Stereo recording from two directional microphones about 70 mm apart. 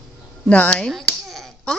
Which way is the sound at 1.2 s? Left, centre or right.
Centre.